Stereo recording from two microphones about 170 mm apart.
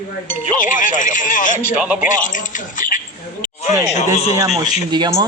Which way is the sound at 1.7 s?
5° right (ahead or behind).